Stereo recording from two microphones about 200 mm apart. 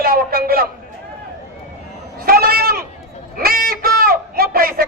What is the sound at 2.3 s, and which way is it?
Sheep, 50° right (ahead or behind).